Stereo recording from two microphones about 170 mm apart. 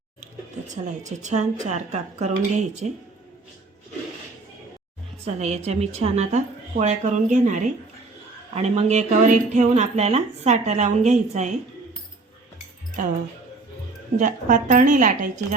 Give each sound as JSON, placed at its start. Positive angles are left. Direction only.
{"t": 1.2, "sound": "speech", "side_deg": -45}
{"t": 5.2, "sound": "speech", "side_deg": -40}
{"t": 14.2, "sound": "speech", "side_deg": -50}